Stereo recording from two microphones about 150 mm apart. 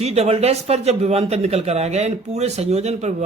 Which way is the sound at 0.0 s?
45° right (ahead or behind).